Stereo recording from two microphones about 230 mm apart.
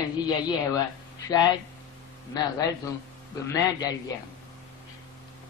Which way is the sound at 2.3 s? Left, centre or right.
Centre.